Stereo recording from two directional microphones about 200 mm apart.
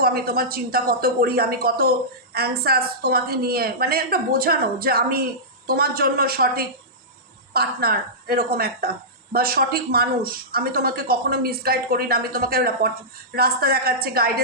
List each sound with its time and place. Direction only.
0.0 s a woman's voice: 50° right (ahead or behind)